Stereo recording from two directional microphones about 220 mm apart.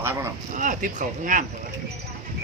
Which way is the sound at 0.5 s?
35° right (ahead or behind).